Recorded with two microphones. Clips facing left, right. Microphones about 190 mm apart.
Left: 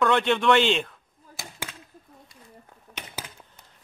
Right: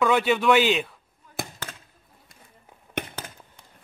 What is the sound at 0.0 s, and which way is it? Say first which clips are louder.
Speech: right 1 dB; 5° right (ahead or behind).